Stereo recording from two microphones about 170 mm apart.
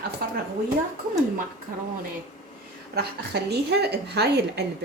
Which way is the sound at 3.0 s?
75° right (ahead or behind).